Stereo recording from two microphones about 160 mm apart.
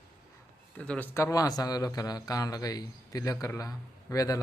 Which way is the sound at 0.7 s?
10° left (ahead or behind).